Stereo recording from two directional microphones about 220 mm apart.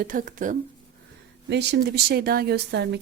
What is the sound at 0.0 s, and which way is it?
Speech, 35° right (ahead or behind).